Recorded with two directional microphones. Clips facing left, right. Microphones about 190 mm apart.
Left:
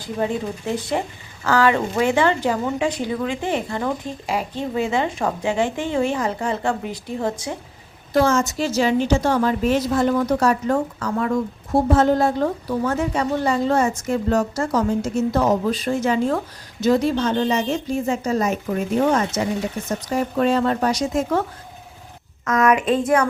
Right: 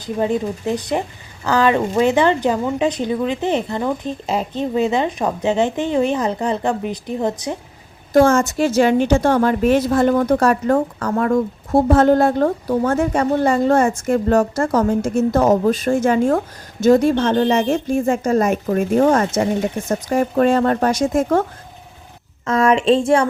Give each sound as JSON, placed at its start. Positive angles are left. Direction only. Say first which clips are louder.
{"t": 0.0, "sound": "speech", "louder": "right 4 dB", "side_deg": -20}
{"t": 8.1, "sound": "a woman's voice", "louder": "right 5 dB", "side_deg": -50}
{"t": 22.4, "sound": "speech", "louder": "right 3 dB", "side_deg": -30}